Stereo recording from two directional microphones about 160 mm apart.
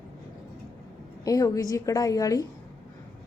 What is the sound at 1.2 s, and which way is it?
A woman's voice, 20° left (ahead or behind).